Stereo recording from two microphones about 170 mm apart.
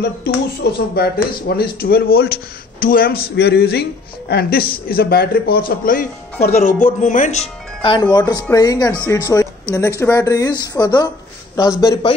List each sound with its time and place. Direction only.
0.0 s a man's voice: 65° left (ahead or behind); by 12.1 s 20° left (ahead or behind)